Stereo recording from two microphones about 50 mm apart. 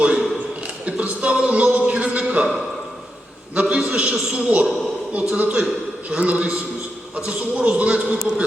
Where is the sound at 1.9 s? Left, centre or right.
Right.